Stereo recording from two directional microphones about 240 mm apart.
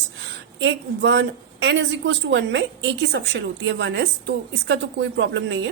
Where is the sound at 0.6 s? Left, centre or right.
Right.